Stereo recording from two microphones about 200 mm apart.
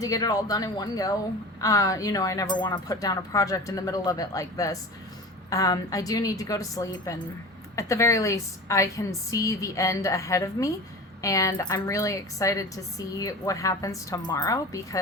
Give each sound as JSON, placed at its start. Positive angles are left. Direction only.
{"t": 0.0, "sound": "a woman's voice", "side_deg": 20}